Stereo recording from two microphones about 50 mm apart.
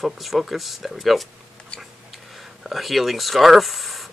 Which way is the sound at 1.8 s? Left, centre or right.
Centre.